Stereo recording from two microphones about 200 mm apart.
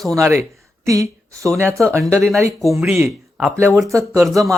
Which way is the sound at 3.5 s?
10° right (ahead or behind).